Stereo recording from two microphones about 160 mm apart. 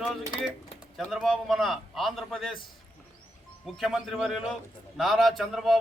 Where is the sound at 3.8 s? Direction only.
5° right (ahead or behind).